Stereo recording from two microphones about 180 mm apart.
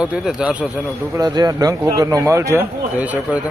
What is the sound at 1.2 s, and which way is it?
Speech, 20° right (ahead or behind).